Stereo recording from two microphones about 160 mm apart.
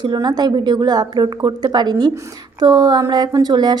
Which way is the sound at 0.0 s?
25° right (ahead or behind).